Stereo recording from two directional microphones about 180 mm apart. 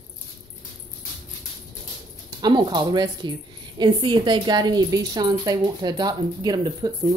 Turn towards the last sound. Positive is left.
turn(degrees=-20)  # may be behind; listen again after turning